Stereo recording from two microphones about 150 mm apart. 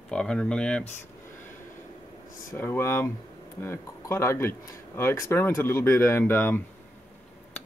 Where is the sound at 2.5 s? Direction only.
15° left (ahead or behind).